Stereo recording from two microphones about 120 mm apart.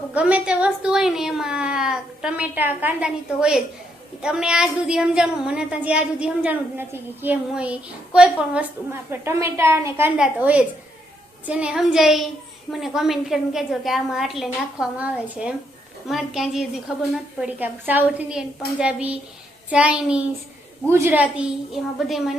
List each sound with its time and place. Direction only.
0.1 s a child's voice: 10° right (ahead or behind)
8.9 s a woman's voice: 20° right (ahead or behind)
10.2 s a child's voice: 10° right (ahead or behind)
17.4 s a child's voice: 15° right (ahead or behind)